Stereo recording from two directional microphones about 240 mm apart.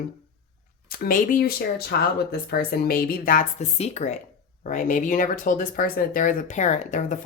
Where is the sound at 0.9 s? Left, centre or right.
Left.